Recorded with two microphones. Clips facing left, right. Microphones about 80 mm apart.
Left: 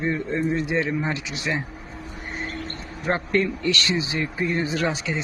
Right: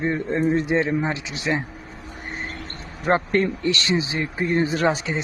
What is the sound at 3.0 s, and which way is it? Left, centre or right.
Speech, right.